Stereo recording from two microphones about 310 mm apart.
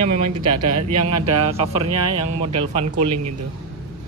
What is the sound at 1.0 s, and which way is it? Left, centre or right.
A man's voice, centre.